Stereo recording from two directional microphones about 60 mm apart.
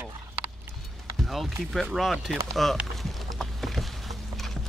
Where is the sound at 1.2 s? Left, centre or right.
Centre.